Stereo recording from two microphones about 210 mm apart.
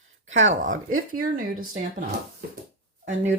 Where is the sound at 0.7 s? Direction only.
85° right.